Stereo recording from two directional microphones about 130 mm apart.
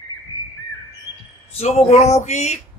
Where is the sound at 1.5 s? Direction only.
55° left (ahead or behind).